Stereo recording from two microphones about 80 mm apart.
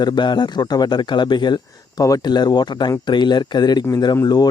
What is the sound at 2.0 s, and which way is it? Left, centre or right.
Speech, left.